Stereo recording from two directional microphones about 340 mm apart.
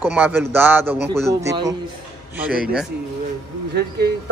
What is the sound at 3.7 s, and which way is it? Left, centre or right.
Speech, right.